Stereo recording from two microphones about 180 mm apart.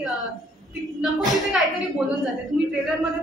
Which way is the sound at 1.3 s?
Centre (ahead or behind).